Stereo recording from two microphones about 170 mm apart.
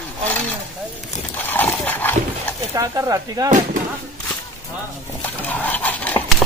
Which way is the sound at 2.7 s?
20° right (ahead or behind).